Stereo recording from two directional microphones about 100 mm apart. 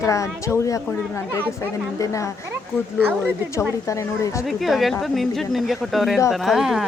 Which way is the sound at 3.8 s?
30° left (ahead or behind).